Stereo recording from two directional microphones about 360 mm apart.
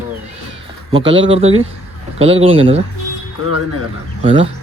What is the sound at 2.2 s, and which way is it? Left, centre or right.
Speech, centre.